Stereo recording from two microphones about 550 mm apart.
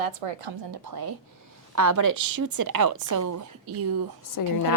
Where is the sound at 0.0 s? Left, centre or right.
Right.